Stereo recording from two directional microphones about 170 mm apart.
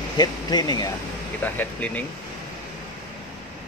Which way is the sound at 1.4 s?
10° left (ahead or behind).